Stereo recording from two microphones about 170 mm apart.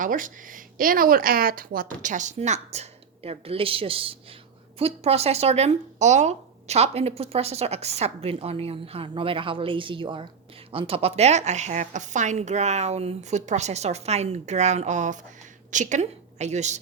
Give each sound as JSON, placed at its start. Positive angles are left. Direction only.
{"t": 0.0, "sound": "a woman's voice", "side_deg": -50}